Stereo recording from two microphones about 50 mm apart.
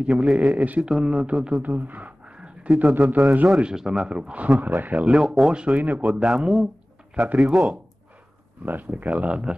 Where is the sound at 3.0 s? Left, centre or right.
Centre.